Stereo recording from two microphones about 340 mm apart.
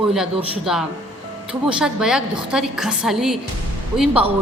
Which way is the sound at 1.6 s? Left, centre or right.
Centre.